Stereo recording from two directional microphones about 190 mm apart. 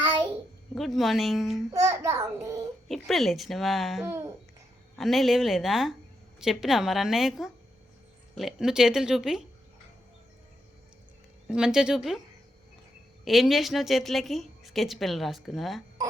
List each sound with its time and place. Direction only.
0.8 s a woman's voice: centre (ahead or behind)
1.7 s a child's voice: 15° right (ahead or behind)
2.9 s a woman's voice: centre (ahead or behind)
11.4 s a woman's voice: 5° right (ahead or behind)
13.2 s a woman's voice: centre (ahead or behind)